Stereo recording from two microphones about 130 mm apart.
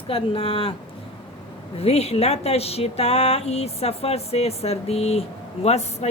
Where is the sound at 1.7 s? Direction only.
50° left (ahead or behind).